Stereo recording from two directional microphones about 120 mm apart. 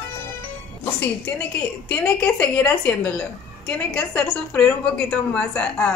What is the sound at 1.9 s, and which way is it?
A woman's voice, 10° left (ahead or behind).